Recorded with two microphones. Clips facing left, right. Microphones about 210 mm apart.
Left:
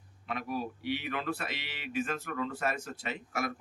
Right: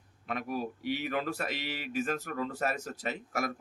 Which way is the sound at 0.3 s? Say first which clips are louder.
Right 1 dB; 45° right (ahead or behind).